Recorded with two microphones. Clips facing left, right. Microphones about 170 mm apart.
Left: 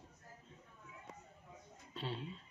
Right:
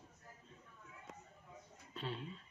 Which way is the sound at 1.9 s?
35° left (ahead or behind).